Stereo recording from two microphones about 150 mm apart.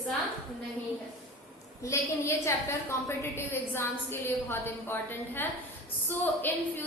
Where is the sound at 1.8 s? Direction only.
20° left (ahead or behind).